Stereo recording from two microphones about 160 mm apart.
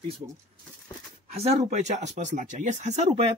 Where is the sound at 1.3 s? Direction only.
40° right (ahead or behind).